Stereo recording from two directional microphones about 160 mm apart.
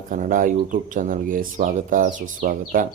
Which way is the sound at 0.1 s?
55° right (ahead or behind).